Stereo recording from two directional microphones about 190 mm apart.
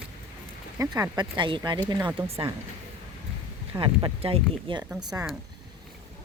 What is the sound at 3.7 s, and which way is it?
Speech, 25° right (ahead or behind).